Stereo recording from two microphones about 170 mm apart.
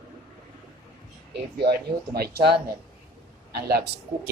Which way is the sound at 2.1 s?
70° right (ahead or behind).